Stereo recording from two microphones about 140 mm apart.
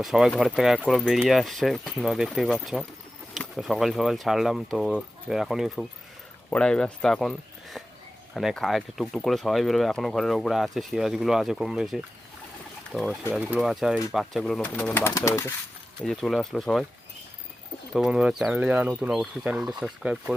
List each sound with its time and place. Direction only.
0.0 s speech: 5° right (ahead or behind)
14.6 s speech: 10° left (ahead or behind)
16.0 s speech: 5° left (ahead or behind)
17.9 s speech: 5° right (ahead or behind)